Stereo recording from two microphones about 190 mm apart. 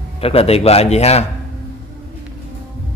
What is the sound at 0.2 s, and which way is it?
Speech, 30° left (ahead or behind).